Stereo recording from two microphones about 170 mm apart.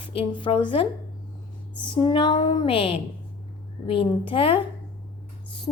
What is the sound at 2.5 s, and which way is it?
A woman's voice, 30° left (ahead or behind).